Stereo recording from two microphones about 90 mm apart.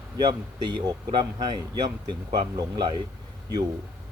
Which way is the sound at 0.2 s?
50° right (ahead or behind).